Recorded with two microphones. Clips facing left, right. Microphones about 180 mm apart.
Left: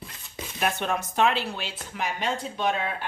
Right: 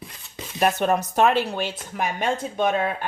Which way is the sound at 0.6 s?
40° right (ahead or behind).